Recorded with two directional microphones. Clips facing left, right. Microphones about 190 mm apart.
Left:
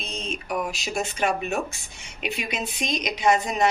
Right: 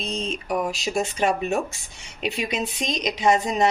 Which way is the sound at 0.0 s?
35° right (ahead or behind).